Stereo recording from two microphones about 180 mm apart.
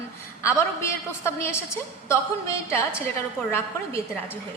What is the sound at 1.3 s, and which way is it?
A woman's voice, 15° left (ahead or behind).